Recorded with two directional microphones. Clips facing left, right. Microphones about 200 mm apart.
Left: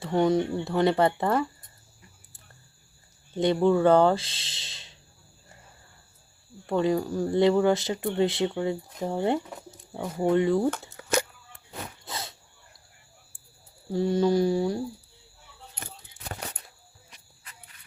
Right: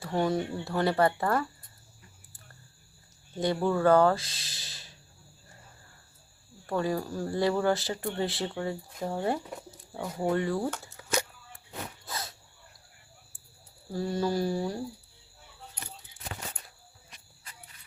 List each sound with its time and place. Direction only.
0.0 s speech: 20° left (ahead or behind)
3.3 s speech: 20° left (ahead or behind)
6.7 s speech: 20° left (ahead or behind)
10.7 s a sound: 60° left (ahead or behind)
12.0 s a sound: 25° left (ahead or behind)
13.9 s speech: 20° left (ahead or behind)